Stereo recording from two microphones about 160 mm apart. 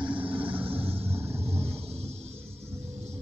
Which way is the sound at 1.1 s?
40° right (ahead or behind).